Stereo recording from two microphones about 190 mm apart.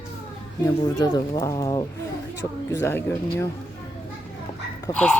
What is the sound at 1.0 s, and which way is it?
Speech, 20° left (ahead or behind).